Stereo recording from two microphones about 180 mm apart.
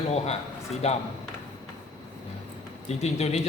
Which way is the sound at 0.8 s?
35° left (ahead or behind).